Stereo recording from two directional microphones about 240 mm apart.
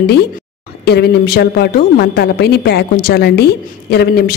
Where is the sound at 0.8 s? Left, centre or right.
Left.